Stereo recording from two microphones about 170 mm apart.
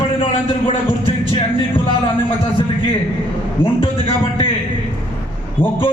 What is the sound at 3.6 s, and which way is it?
Speech, 30° left (ahead or behind).